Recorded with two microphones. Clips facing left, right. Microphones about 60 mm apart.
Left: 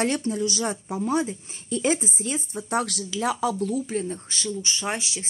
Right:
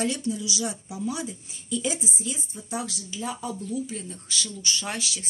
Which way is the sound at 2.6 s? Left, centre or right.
Left.